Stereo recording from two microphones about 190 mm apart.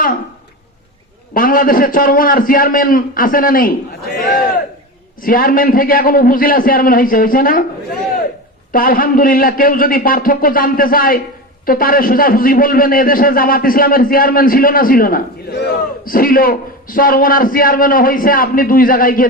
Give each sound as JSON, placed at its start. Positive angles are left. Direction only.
{"t": 1.3, "sound": "a man's voice", "side_deg": 50}
{"t": 5.2, "sound": "a man's voice", "side_deg": 45}
{"t": 8.7, "sound": "a man's voice", "side_deg": 50}